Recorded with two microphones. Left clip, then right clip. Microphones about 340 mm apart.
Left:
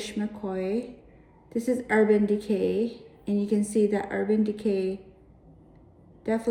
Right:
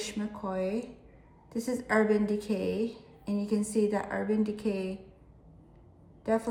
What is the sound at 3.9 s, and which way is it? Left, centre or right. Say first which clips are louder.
Speech: left 3 dB; right.